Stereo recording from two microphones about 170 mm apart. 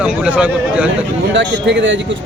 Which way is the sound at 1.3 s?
90° right.